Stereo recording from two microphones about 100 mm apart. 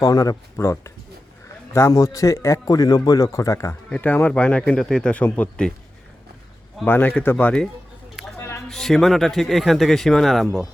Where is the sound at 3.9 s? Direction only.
15° left (ahead or behind).